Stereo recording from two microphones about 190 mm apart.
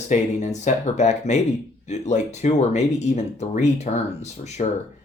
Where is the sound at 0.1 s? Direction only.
40° left (ahead or behind).